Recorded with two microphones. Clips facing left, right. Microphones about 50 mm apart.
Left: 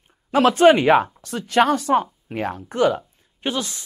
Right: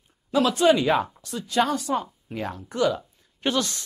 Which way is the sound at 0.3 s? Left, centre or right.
Left.